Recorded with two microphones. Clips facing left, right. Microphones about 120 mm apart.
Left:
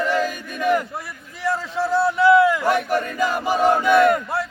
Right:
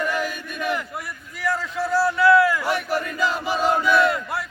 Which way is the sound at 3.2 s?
50° left (ahead or behind).